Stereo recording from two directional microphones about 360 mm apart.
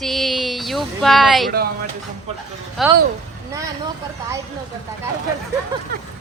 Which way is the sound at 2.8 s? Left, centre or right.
Centre.